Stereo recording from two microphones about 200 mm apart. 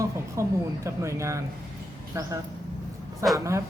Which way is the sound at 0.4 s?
15° right (ahead or behind).